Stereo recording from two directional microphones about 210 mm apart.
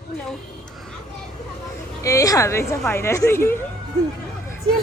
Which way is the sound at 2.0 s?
15° left (ahead or behind).